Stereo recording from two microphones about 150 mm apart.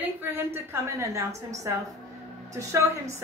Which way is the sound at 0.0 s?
15° right (ahead or behind).